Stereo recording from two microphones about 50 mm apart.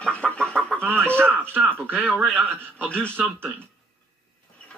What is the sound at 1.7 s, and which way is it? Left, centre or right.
A man's voice, right.